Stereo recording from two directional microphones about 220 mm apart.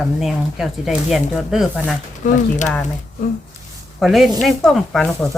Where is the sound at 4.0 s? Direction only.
Centre (ahead or behind).